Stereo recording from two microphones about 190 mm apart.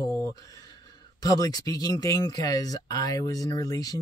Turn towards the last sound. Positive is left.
turn(degrees=20)  # may be behind; listen again after turning